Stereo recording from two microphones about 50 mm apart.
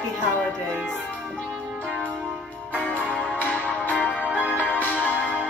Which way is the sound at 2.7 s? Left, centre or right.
Left.